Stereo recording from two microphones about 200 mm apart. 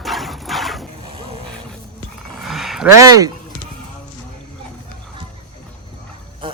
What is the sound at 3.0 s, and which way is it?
Speech, 15° right (ahead or behind).